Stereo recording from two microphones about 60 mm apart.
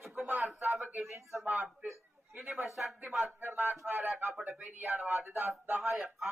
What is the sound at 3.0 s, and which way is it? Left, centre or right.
Speech, right.